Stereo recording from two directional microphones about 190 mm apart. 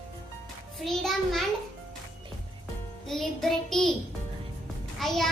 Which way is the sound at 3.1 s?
Centre (ahead or behind).